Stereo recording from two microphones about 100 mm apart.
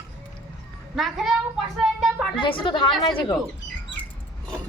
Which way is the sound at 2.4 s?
55° left (ahead or behind).